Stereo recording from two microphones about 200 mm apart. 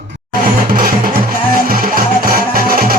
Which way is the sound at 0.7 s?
45° right (ahead or behind).